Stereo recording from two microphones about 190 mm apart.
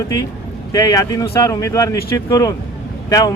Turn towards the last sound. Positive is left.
turn(degrees=20)  # may be behind; listen again after turning